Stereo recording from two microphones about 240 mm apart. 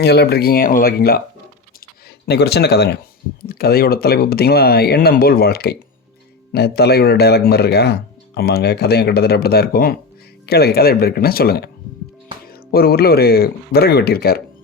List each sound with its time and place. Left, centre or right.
0.0 s speech: left
2.2 s speech: left